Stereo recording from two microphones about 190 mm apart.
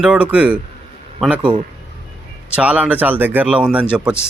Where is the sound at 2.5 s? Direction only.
5° right (ahead or behind).